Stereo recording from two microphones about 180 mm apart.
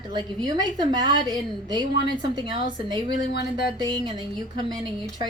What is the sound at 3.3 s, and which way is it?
Speech, 60° left (ahead or behind).